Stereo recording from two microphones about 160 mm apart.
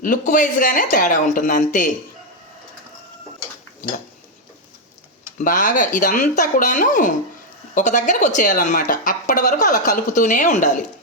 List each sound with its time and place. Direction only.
0.0 s speech: 55° left (ahead or behind)
5.4 s a woman's voice: 60° left (ahead or behind)